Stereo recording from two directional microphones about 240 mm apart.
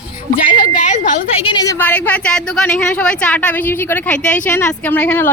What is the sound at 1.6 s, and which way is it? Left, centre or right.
A woman's voice, centre.